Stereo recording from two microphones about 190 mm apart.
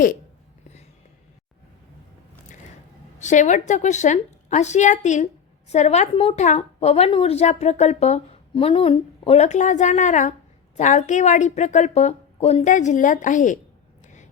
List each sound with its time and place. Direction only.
3.2 s a woman's voice: 40° left (ahead or behind)